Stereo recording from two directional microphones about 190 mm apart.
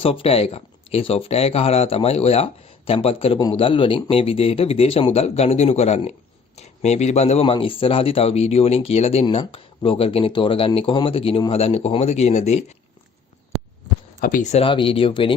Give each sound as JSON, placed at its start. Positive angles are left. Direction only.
{"t": 0.0, "sound": "speech", "side_deg": 30}
{"t": 14.2, "sound": "speech", "side_deg": 45}
{"t": 14.6, "sound": "speech", "side_deg": 25}